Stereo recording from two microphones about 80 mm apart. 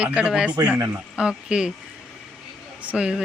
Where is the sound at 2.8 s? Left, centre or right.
Centre.